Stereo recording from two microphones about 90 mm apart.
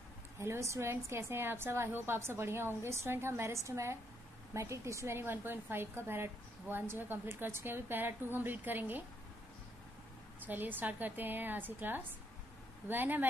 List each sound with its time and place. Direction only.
0.4 s a woman's voice: 30° right (ahead or behind)
10.4 s a woman's voice: 20° right (ahead or behind)